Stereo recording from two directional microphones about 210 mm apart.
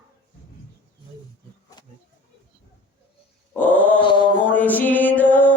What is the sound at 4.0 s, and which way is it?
Mantra, 25° left (ahead or behind).